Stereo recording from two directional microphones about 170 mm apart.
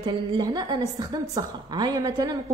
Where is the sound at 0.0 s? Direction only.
25° right (ahead or behind).